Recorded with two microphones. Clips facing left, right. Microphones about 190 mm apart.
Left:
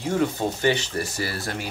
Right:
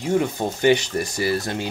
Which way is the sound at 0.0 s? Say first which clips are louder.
Right 2 dB; 15° right (ahead or behind).